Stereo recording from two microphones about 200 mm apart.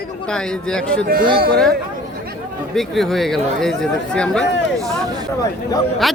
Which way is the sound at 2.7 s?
Centre (ahead or behind).